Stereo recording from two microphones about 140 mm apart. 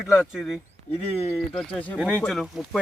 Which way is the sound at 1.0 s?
45° left (ahead or behind).